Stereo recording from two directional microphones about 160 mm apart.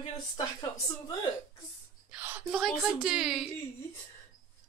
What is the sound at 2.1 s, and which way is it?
A woman's voice, 10° right (ahead or behind).